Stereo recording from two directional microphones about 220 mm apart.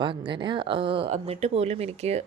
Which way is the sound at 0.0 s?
20° right (ahead or behind).